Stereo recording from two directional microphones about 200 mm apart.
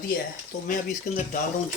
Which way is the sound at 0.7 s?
40° left (ahead or behind).